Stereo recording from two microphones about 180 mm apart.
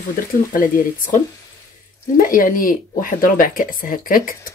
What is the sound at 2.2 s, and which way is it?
Speech, 50° left (ahead or behind).